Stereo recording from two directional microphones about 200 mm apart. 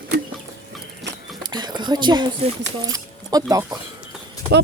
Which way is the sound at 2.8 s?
20° right (ahead or behind).